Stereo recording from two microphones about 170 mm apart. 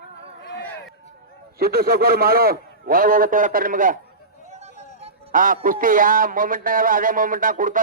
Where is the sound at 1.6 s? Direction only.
60° right (ahead or behind).